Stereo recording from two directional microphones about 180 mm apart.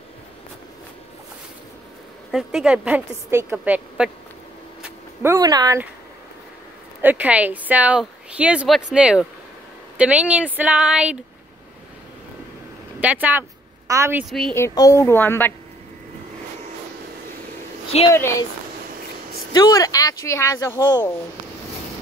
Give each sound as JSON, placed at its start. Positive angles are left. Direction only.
{"t": 2.3, "sound": "speech", "side_deg": -5}
{"t": 4.8, "sound": "a sound", "side_deg": -15}
{"t": 7.0, "sound": "speech", "side_deg": -10}
{"t": 13.0, "sound": "speech", "side_deg": -10}
{"t": 14.5, "sound": "a woman's voice", "side_deg": 15}
{"t": 17.9, "sound": "speech", "side_deg": 35}
{"t": 19.5, "sound": "speech", "side_deg": 20}